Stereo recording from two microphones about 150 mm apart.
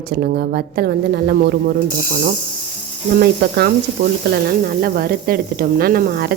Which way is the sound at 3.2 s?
90° right.